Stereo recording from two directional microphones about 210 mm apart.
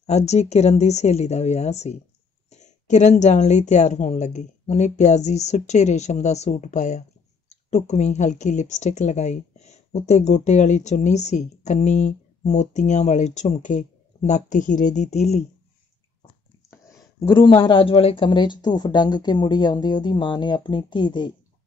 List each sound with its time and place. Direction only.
0.0 s a woman's voice: 30° left (ahead or behind)
16.7 s speech: 15° left (ahead or behind)